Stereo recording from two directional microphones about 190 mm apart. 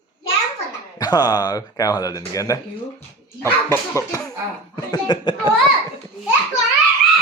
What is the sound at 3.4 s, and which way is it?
Cough, 15° left (ahead or behind).